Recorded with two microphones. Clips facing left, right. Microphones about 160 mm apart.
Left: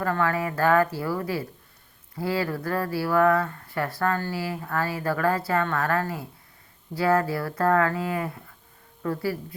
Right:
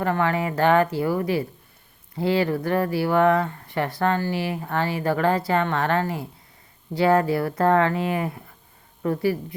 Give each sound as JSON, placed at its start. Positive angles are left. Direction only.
{"t": 0.0, "sound": "speech", "side_deg": -20}